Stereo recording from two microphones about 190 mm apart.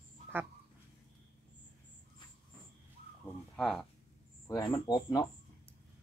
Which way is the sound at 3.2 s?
Centre (ahead or behind).